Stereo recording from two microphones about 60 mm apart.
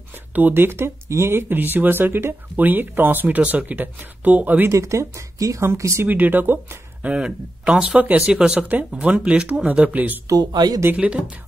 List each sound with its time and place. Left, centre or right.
0.3 s speech: right
4.6 s speech: right
6.0 s speech: right
7.0 s speech: centre
10.2 s speech: right
11.0 s speech: centre